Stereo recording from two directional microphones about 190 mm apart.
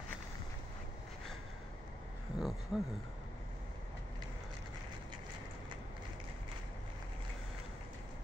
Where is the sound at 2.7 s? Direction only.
Centre (ahead or behind).